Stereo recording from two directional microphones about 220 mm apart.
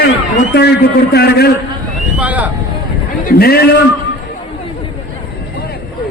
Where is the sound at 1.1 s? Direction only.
45° left (ahead or behind).